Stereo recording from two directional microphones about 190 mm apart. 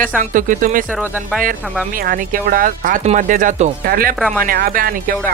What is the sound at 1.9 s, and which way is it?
Speech, 45° right (ahead or behind).